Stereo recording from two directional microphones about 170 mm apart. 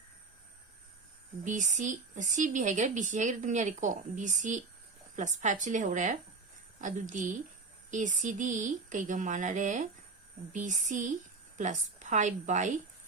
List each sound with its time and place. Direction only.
1.5 s speech: 45° right (ahead or behind)